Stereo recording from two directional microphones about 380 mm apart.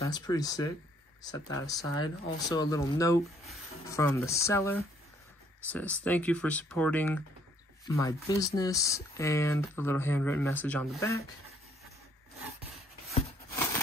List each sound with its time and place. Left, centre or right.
0.0 s speech: centre